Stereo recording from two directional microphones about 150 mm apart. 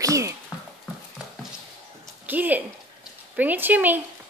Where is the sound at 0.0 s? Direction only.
20° right (ahead or behind).